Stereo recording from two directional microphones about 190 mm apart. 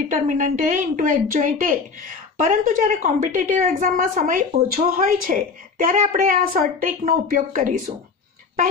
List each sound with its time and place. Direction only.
0.1 s a woman's voice: 45° right (ahead or behind)